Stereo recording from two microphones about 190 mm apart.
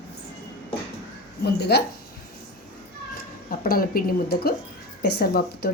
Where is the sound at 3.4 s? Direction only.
50° left (ahead or behind).